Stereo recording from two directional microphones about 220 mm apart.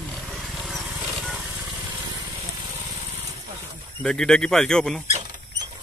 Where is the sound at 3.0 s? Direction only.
30° right (ahead or behind).